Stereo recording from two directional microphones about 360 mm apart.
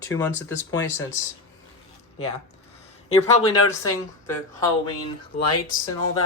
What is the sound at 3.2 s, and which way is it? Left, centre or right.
Speech, centre.